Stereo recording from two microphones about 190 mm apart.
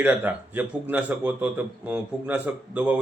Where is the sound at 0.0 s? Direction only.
10° right (ahead or behind).